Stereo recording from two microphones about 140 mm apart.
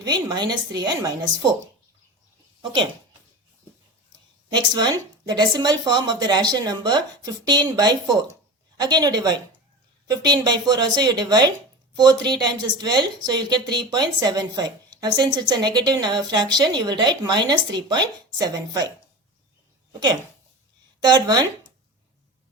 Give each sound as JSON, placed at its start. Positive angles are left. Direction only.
{"t": 0.0, "sound": "a woman's voice", "side_deg": -30}
{"t": 4.5, "sound": "a woman's voice", "side_deg": -30}
{"t": 10.4, "sound": "a woman's voice", "side_deg": -30}
{"t": 19.9, "sound": "a woman's voice", "side_deg": -30}